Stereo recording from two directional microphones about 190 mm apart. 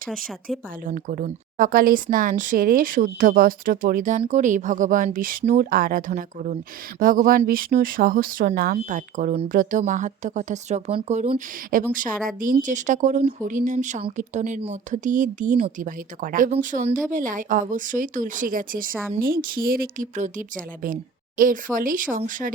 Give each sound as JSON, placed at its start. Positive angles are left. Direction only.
{"t": 0.9, "sound": "a woman's voice", "side_deg": -45}